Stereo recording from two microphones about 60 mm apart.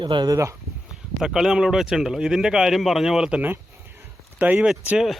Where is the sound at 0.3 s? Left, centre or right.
Right.